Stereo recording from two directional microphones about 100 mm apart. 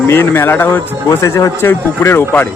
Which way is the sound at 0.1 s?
25° left (ahead or behind).